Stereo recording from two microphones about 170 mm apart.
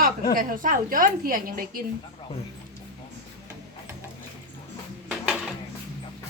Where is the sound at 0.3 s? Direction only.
55° right (ahead or behind).